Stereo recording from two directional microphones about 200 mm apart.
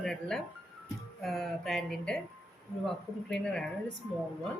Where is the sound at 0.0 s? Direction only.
Centre (ahead or behind).